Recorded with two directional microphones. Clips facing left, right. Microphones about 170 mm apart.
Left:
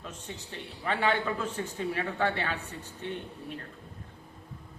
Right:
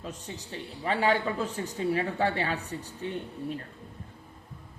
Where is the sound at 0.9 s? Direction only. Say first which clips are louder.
Right 2 dB; 35° right (ahead or behind).